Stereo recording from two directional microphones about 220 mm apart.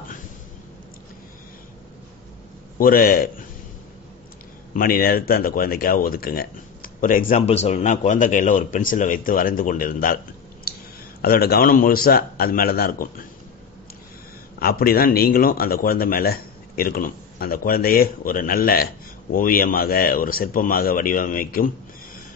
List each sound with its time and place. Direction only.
2.8 s a man's voice: 40° left (ahead or behind)
4.7 s speech: 40° left (ahead or behind)
11.2 s a man's voice: 45° left (ahead or behind)
14.6 s a man's voice: 45° left (ahead or behind)